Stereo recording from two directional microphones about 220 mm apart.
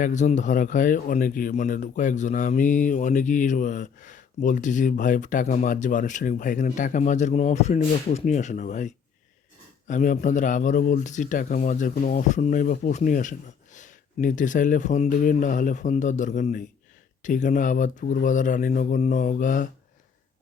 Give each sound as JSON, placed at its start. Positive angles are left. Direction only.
{"t": 0.0, "sound": "speech", "side_deg": 35}